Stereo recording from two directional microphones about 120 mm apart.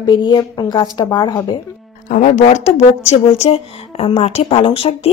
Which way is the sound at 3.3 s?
55° left (ahead or behind).